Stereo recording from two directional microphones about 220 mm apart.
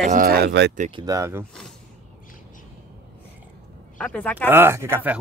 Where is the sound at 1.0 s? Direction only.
15° right (ahead or behind).